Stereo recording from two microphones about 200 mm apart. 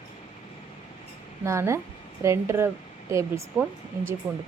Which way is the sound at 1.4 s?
15° right (ahead or behind).